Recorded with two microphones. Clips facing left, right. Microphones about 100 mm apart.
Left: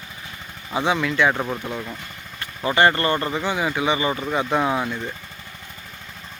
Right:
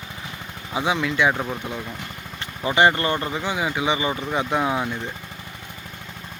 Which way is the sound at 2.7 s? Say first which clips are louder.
Even; 15° right (ahead or behind).